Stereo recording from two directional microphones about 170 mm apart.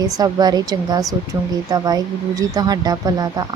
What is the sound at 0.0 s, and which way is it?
Speech, 20° right (ahead or behind).